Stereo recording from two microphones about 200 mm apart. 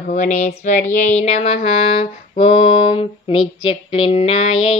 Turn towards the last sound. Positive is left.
turn(degrees=30)  # may be behind; listen again after turning